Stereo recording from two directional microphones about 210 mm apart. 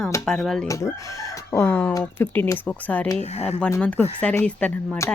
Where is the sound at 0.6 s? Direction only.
15° left (ahead or behind).